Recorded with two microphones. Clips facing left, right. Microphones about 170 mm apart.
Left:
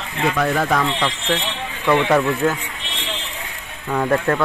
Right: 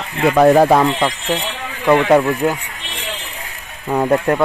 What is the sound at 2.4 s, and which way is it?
Speech, 15° right (ahead or behind).